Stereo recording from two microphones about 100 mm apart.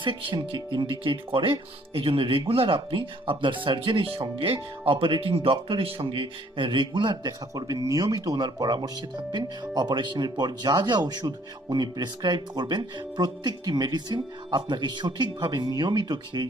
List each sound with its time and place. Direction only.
0.0 s speech: 55° right (ahead or behind)